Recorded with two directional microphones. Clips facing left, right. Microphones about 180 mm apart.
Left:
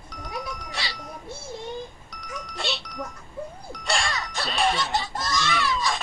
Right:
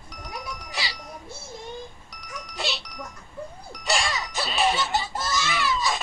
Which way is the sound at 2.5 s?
Centre (ahead or behind).